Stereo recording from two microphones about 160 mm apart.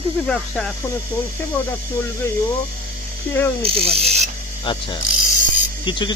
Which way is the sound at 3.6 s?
35° right (ahead or behind).